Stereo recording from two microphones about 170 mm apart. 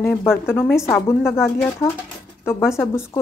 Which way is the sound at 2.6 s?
15° left (ahead or behind).